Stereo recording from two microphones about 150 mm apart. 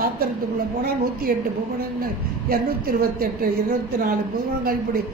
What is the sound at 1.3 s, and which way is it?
A woman's voice, 75° right (ahead or behind).